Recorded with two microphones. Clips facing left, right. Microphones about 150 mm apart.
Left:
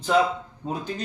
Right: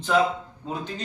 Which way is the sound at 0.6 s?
15° left (ahead or behind).